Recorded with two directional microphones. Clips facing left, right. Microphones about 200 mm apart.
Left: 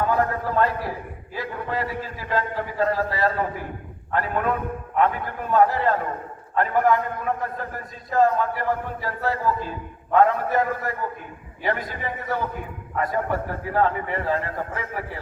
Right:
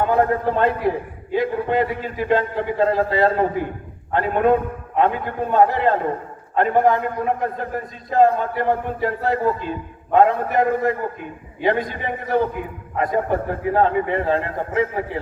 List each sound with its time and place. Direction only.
0.0 s a man's voice: 25° right (ahead or behind)